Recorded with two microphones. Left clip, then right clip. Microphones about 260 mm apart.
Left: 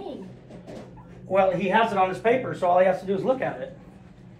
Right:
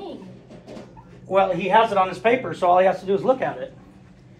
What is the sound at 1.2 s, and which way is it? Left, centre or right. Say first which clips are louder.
Speech: right 2 dB; centre.